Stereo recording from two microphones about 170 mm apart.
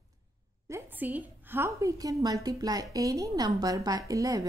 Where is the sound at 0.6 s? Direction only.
15° right (ahead or behind).